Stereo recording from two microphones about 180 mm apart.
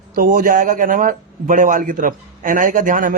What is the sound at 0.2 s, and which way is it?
A man's voice, 50° right (ahead or behind).